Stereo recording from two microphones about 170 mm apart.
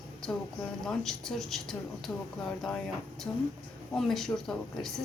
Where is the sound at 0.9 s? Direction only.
Centre (ahead or behind).